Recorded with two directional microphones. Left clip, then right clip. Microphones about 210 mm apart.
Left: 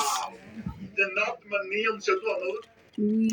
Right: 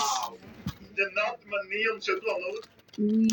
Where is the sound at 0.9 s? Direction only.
35° left (ahead or behind).